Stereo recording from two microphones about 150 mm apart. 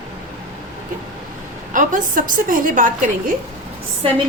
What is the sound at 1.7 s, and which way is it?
A woman's voice, 60° right (ahead or behind).